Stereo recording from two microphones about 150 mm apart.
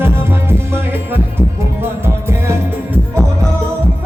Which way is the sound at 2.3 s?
15° right (ahead or behind).